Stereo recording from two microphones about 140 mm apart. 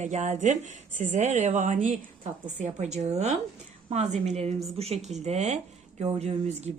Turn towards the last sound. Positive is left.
turn(degrees=-50)  # may be behind; listen again after turning